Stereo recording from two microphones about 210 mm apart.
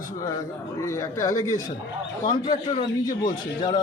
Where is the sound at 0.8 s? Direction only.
15° left (ahead or behind).